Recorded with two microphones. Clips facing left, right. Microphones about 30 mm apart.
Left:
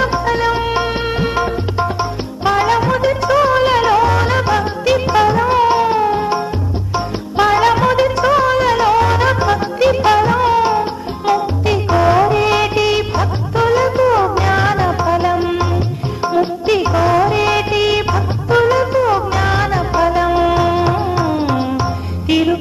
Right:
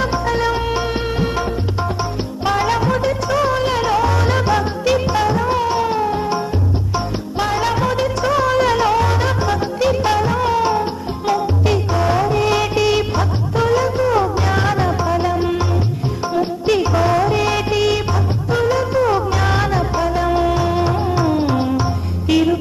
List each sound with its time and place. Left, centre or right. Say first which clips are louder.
0.0 s music: left 3 dB; centre
7.3 s music: left 7 dB; left
18.9 s music: left 2 dB; centre
19.9 s music: left 4 dB; left